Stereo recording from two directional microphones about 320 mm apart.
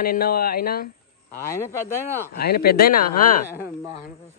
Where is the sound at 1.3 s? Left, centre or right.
Centre.